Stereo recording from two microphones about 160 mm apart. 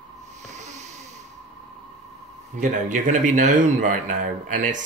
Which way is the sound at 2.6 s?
50° right (ahead or behind).